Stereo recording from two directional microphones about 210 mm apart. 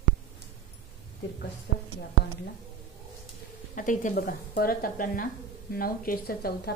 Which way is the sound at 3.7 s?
40° left (ahead or behind).